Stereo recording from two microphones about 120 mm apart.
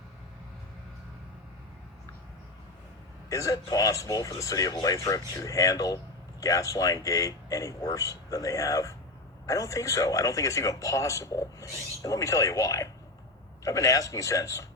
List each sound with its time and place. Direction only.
3.2 s speech: 30° left (ahead or behind)